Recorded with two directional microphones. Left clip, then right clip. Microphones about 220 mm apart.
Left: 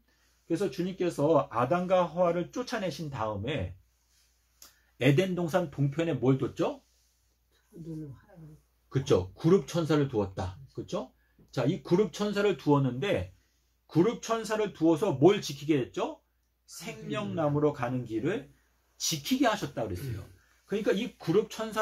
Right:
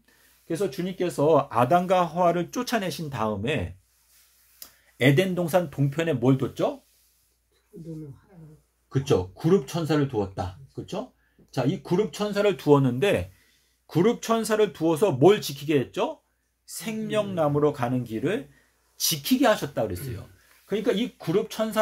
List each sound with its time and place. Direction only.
0.5 s speech: 40° right (ahead or behind)
4.6 s speech: 35° right (ahead or behind)
8.8 s speech: 15° right (ahead or behind)
11.5 s speech: 15° right (ahead or behind)
12.4 s speech: 35° right (ahead or behind)